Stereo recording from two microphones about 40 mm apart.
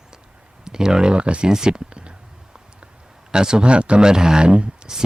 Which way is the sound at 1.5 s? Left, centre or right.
Centre.